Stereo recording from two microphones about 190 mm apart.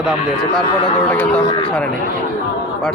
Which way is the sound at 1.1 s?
10° left (ahead or behind).